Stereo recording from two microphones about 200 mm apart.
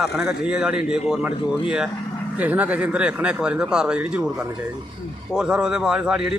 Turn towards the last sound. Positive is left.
turn(degrees=-5)  # may be behind; listen again after turning